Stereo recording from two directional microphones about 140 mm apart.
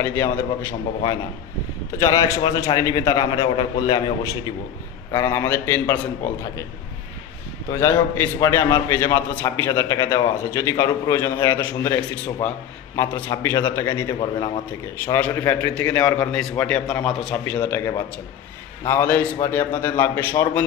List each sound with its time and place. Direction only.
0.0 s a man's voice: 20° left (ahead or behind)
2.0 s a man's voice: 20° left (ahead or behind)
7.7 s a man's voice: 15° left (ahead or behind)
15.1 s a man's voice: 15° left (ahead or behind)